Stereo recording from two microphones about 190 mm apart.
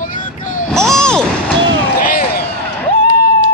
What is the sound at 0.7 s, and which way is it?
Speech, 5° left (ahead or behind).